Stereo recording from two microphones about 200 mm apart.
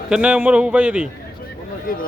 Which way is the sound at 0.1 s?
5° right (ahead or behind).